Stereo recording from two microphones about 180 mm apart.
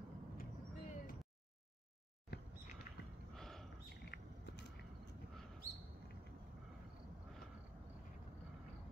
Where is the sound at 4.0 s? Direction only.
60° left (ahead or behind).